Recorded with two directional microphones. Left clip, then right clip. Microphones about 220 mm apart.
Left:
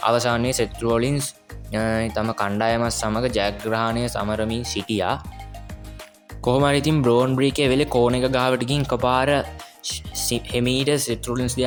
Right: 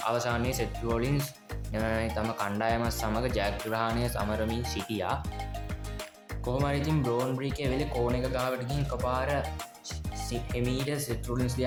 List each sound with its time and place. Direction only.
0.0 s speech: 35° left (ahead or behind)
6.4 s speech: 35° left (ahead or behind)
9.8 s music: 40° left (ahead or behind)
10.5 s speech: 40° left (ahead or behind)